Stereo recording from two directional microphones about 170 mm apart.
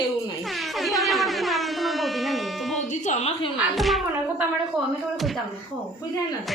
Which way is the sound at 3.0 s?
40° left (ahead or behind).